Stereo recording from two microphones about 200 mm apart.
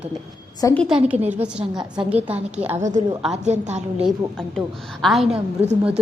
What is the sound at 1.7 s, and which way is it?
Speech, 20° right (ahead or behind).